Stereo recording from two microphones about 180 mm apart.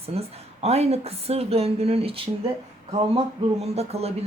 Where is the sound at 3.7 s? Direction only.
35° right (ahead or behind).